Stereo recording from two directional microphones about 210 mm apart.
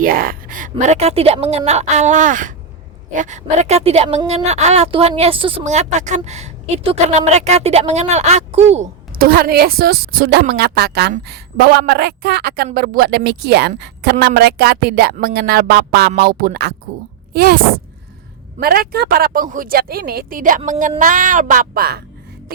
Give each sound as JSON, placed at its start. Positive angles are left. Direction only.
{"t": 0.0, "sound": "speech", "side_deg": -45}
{"t": 9.1, "sound": "a woman's voice", "side_deg": -45}
{"t": 18.6, "sound": "a woman's voice", "side_deg": -45}